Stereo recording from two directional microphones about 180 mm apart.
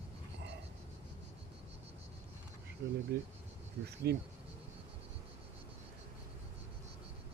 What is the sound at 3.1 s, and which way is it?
Speech, 60° right (ahead or behind).